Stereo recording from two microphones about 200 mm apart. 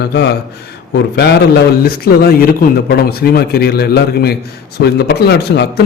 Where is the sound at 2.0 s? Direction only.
50° left (ahead or behind).